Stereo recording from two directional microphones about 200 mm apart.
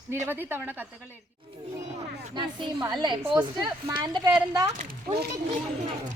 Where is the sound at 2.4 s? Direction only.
20° right (ahead or behind).